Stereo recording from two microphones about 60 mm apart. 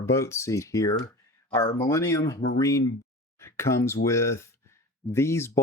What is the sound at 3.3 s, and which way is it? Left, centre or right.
Speech, left.